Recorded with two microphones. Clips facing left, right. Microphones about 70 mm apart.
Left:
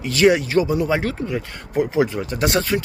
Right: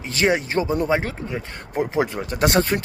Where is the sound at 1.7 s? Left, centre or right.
Right.